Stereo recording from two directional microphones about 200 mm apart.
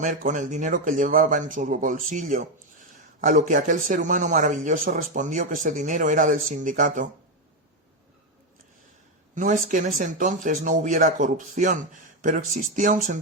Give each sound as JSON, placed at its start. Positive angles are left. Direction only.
{"t": 0.0, "sound": "a man's voice", "side_deg": -40}
{"t": 9.3, "sound": "a man's voice", "side_deg": -40}